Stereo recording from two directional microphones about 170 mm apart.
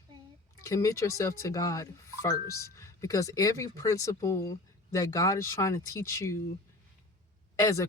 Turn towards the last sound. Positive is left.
turn(degrees=20)  # may be behind; listen again after turning